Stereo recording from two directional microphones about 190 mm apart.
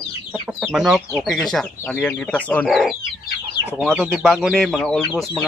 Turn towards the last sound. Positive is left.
turn(degrees=0)  # may be behind; listen again after turning